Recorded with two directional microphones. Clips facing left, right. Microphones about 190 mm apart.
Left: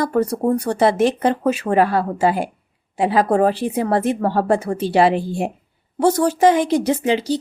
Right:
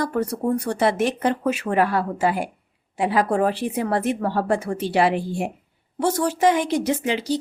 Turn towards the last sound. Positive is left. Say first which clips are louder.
# left 4 dB
turn(degrees=30)  # may be behind; listen again after turning